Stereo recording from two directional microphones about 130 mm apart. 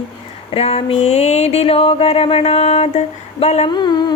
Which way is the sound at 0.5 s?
50° left (ahead or behind).